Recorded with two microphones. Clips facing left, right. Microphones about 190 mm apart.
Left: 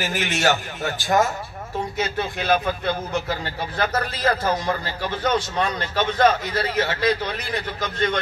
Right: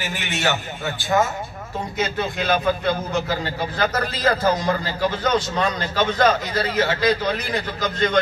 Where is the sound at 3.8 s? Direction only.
30° left (ahead or behind).